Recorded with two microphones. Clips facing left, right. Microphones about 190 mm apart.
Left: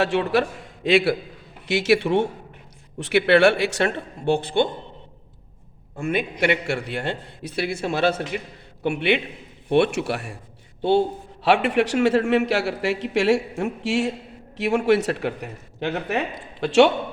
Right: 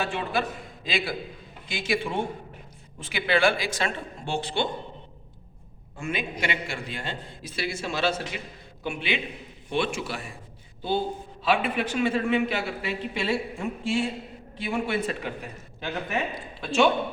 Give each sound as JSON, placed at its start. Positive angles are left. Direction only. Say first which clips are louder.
{"t": 0.0, "sound": "a man's voice", "louder": "left 8 dB", "side_deg": 75}
{"t": 6.0, "sound": "a man's voice", "louder": "left 7 dB", "side_deg": 60}
{"t": 8.8, "sound": "a man's voice", "louder": "left 8 dB", "side_deg": 65}
{"t": 11.4, "sound": "a man's voice", "louder": "left 6 dB", "side_deg": 75}